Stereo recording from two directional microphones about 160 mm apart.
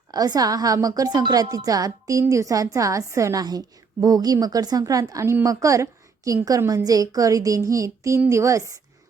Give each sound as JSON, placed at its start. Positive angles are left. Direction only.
{"t": 0.1, "sound": "a woman's voice", "side_deg": -25}